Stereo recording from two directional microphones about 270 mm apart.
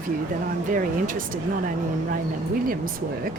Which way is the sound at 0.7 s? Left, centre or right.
Right.